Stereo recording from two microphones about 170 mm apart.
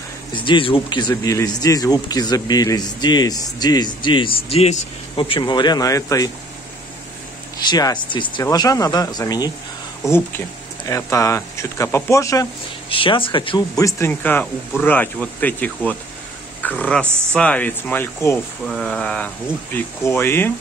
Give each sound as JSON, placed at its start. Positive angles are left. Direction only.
{"t": 0.3, "sound": "speech", "side_deg": 30}
{"t": 7.7, "sound": "speech", "side_deg": 25}
{"t": 12.9, "sound": "speech", "side_deg": 30}
{"t": 18.7, "sound": "speech", "side_deg": 5}